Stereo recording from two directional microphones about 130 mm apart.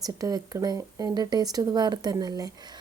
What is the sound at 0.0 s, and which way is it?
Speech, 30° right (ahead or behind).